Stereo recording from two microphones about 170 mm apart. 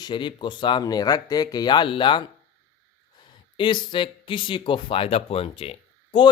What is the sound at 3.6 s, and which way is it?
Speech, 30° left (ahead or behind).